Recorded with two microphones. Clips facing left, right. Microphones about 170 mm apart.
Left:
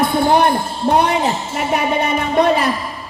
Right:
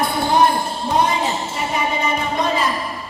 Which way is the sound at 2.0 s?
65° left (ahead or behind).